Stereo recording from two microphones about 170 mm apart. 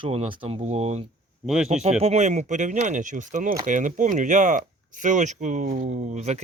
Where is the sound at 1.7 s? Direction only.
40° right (ahead or behind).